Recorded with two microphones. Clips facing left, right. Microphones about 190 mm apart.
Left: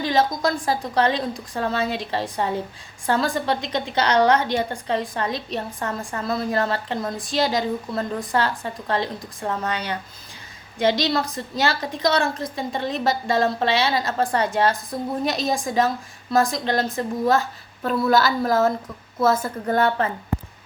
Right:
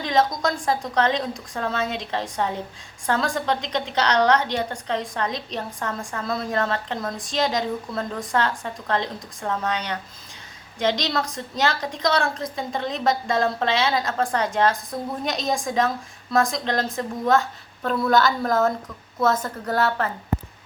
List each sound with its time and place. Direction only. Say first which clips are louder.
0.0 s a woman's voice: left 1 dB; 5° left (ahead or behind)